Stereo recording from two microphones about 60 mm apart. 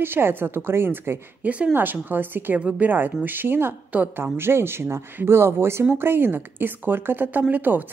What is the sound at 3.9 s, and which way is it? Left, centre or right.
Speech, right.